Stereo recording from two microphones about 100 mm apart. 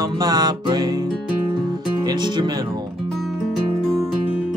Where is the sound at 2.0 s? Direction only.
50° right (ahead or behind).